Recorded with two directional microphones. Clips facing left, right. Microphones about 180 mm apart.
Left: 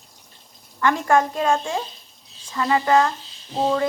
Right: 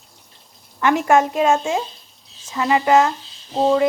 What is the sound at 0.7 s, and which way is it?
Speech, 20° right (ahead or behind).